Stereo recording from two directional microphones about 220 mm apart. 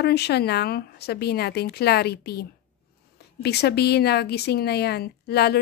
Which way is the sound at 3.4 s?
50° left (ahead or behind).